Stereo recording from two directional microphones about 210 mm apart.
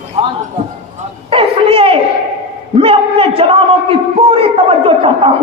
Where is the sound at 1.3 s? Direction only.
25° right (ahead or behind).